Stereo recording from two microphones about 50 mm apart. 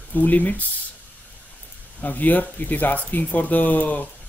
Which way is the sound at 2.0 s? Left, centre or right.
Left.